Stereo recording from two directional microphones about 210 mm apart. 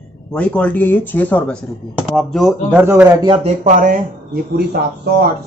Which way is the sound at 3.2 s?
25° right (ahead or behind).